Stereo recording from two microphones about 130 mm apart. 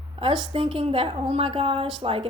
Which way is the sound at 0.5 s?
45° right (ahead or behind).